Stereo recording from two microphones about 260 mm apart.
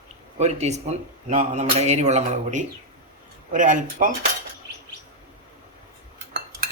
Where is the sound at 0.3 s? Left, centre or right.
Right.